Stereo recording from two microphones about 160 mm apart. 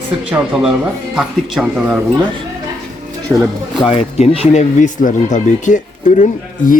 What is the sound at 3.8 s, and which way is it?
Speech, 35° left (ahead or behind).